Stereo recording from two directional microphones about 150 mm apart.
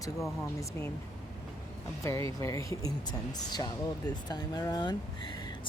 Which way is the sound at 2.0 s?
20° left (ahead or behind).